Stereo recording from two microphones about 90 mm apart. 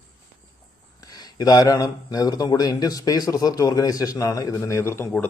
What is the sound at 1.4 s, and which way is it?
Speech, 45° left (ahead or behind).